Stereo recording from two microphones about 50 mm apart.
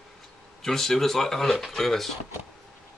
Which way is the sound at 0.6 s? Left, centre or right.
Centre.